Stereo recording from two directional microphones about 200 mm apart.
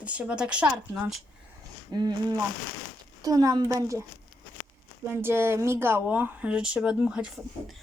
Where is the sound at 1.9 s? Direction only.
20° right (ahead or behind).